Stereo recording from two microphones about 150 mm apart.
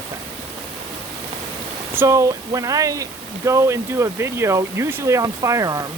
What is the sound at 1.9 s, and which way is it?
Speech, 20° right (ahead or behind).